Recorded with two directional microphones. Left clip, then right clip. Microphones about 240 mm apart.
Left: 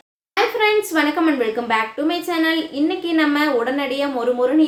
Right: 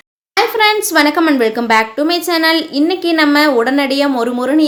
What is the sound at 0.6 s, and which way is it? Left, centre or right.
A woman's voice, right.